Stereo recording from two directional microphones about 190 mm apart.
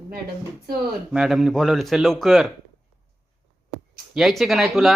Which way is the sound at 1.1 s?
Centre (ahead or behind).